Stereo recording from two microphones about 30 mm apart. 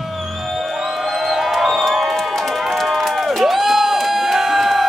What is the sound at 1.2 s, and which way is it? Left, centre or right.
Music, centre.